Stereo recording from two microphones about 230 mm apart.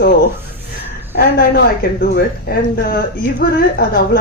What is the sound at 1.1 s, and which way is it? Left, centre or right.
A woman's voice, left.